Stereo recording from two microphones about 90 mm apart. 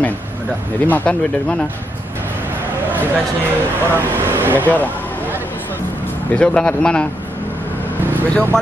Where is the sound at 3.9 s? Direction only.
25° right (ahead or behind).